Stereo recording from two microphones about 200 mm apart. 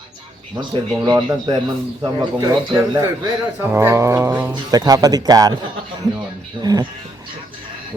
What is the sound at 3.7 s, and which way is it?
Cat, 10° right (ahead or behind).